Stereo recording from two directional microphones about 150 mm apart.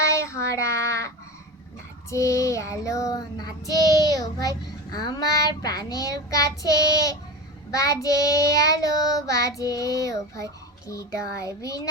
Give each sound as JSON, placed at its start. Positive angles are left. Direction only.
{"t": 0.0, "sound": "child singing", "side_deg": 20}